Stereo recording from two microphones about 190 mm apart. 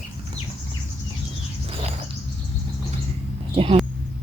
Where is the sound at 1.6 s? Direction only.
35° right (ahead or behind).